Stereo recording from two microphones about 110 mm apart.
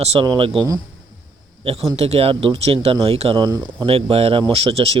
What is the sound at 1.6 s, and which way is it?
A man's voice, 60° right (ahead or behind).